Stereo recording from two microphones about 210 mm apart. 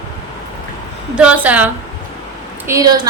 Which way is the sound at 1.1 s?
5° right (ahead or behind).